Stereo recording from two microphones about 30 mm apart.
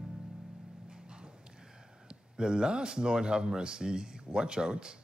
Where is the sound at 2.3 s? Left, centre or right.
Right.